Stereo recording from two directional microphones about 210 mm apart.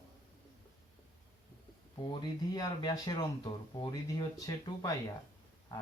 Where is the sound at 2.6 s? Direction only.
15° left (ahead or behind).